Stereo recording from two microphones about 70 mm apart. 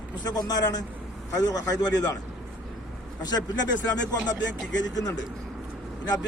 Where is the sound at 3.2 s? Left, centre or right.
Left.